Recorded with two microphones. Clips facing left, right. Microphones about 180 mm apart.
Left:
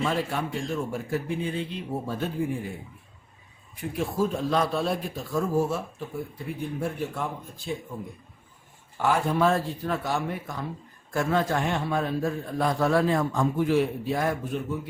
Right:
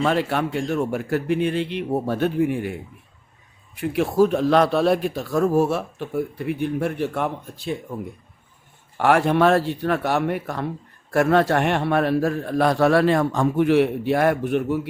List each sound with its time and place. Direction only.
0.0 s a man's voice: 75° right (ahead or behind)
3.8 s a man's voice: 75° right (ahead or behind)
9.0 s a man's voice: 75° right (ahead or behind)